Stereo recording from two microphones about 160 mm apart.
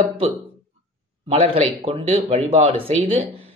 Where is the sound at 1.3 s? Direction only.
35° right (ahead or behind).